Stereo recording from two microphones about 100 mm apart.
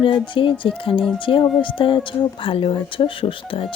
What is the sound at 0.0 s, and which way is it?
Speech, 60° left (ahead or behind).